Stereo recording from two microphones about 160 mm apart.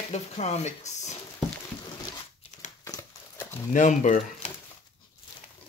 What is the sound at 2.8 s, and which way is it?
Crumpling, 20° left (ahead or behind).